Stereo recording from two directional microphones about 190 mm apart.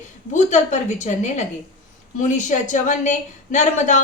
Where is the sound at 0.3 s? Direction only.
35° left (ahead or behind).